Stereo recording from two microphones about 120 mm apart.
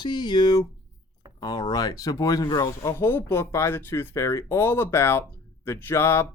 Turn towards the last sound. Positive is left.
turn(degrees=20)  # may be behind; listen again after turning